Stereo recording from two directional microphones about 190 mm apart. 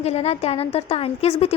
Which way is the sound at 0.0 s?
35° left (ahead or behind).